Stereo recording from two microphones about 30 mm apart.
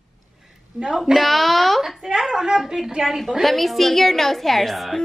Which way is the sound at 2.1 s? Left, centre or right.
Centre.